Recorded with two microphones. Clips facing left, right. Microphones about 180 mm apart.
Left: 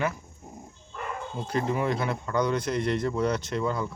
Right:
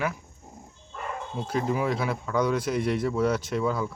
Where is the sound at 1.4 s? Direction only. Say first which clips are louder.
Right 1 dB; centre (ahead or behind).